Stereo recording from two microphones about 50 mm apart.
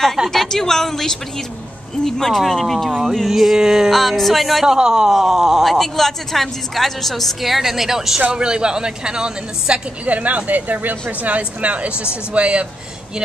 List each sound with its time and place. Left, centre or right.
0.3 s a woman's voice: centre
4.7 s a woman's voice: centre
5.1 s speech: centre
8.3 s a woman's voice: centre
10.0 s speech: right